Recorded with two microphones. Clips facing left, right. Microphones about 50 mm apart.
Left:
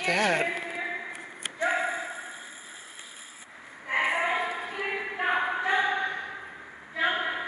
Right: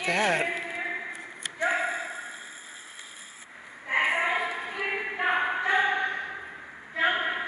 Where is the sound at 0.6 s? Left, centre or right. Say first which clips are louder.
Right 1 dB; centre.